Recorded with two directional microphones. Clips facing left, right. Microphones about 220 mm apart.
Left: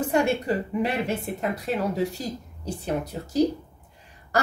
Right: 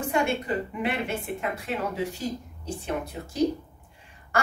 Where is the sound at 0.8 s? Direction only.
40° left (ahead or behind).